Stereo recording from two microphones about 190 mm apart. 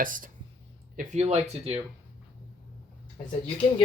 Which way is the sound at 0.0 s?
45° right (ahead or behind).